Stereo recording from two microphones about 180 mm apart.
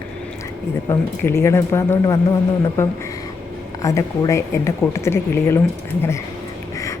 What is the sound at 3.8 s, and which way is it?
A woman's voice, 20° left (ahead or behind).